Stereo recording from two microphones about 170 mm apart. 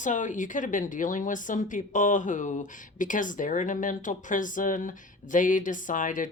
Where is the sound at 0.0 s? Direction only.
50° left (ahead or behind).